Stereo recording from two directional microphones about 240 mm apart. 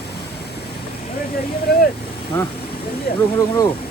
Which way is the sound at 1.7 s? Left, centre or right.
Left.